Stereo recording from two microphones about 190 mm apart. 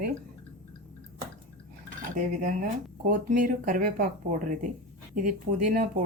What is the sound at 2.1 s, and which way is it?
Speech, 45° right (ahead or behind).